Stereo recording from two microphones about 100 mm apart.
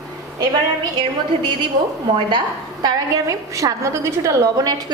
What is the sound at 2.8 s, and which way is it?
A woman's voice, 35° right (ahead or behind).